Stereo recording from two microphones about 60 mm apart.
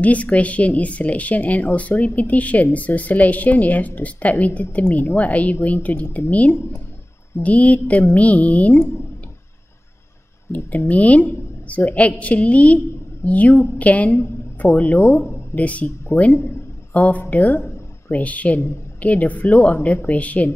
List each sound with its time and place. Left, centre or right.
0.0 s speech: left
7.4 s speech: left
10.9 s a woman's voice: left
15.0 s speech: left
15.5 s speech: left